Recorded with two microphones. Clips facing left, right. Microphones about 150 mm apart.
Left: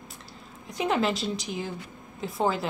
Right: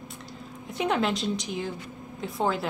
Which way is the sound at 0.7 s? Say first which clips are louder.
Even; centre (ahead or behind).